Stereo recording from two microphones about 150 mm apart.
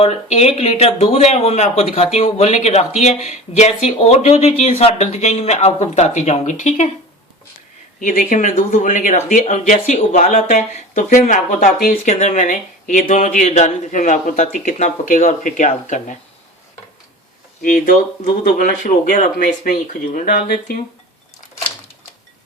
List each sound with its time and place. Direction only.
0.0 s speech: 45° left (ahead or behind)
7.9 s speech: 60° left (ahead or behind)
17.6 s speech: 65° left (ahead or behind)